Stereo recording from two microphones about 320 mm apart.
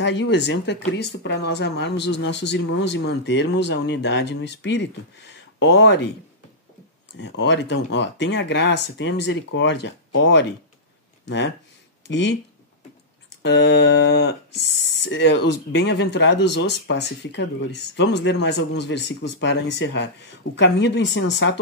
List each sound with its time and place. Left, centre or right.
0.0 s speech: left
7.2 s speech: left
13.4 s speech: left